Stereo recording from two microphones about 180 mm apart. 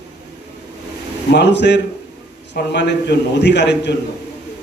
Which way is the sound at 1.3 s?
70° left (ahead or behind).